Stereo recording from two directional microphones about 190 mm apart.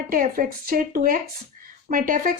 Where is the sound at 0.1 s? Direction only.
50° right (ahead or behind).